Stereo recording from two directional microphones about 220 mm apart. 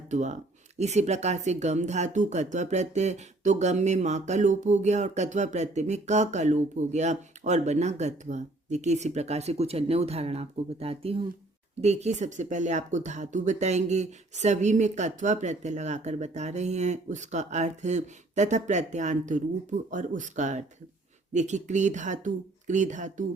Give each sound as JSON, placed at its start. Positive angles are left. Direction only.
{"t": 0.1, "sound": "speech", "side_deg": -35}